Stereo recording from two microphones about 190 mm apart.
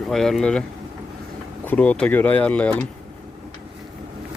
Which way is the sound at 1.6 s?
10° left (ahead or behind).